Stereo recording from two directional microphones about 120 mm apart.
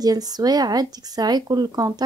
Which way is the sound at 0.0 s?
30° right (ahead or behind).